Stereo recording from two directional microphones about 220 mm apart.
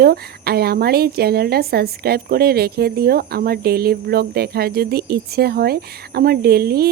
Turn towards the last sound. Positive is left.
turn(degrees=-45)  # may be behind; listen again after turning